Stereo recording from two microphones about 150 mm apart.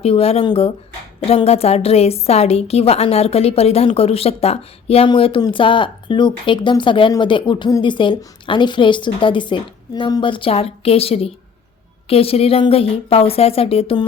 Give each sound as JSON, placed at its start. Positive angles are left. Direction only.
{"t": 0.0, "sound": "a woman's voice", "side_deg": 40}